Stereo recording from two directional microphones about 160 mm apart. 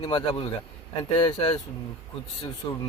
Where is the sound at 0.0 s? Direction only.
30° left (ahead or behind).